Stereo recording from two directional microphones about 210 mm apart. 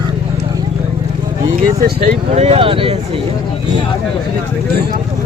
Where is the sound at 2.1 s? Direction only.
30° right (ahead or behind).